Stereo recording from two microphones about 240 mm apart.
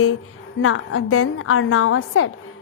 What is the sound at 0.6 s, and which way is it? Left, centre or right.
A woman's voice, left.